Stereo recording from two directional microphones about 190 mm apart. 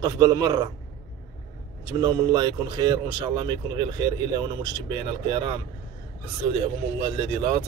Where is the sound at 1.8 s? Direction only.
20° right (ahead or behind).